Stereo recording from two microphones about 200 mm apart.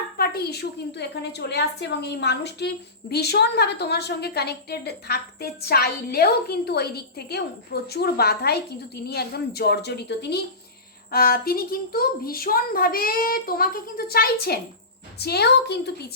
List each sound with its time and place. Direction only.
0.2 s a woman's voice: 50° left (ahead or behind)